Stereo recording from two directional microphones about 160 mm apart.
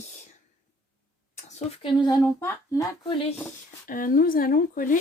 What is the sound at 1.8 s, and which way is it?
Speech, 25° left (ahead or behind).